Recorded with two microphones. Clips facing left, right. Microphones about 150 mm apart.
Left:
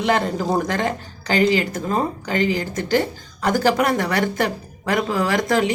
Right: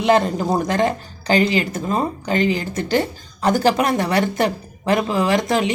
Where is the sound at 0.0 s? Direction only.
25° right (ahead or behind).